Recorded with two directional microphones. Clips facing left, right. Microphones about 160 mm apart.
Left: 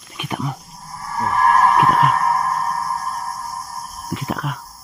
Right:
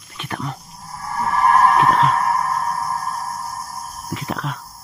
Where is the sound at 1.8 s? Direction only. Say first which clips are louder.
Even; 10° left (ahead or behind).